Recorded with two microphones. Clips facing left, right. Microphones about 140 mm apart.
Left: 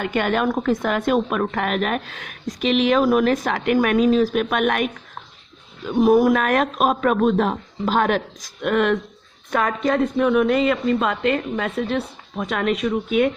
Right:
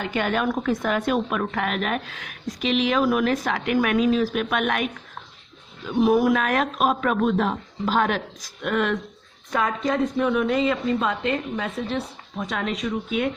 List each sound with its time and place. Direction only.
0.0 s a woman's voice: 55° left (ahead or behind)